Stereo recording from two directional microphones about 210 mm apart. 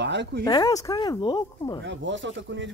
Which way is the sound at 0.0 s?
55° right (ahead or behind).